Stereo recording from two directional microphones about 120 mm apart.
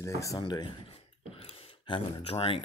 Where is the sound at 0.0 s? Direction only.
25° left (ahead or behind).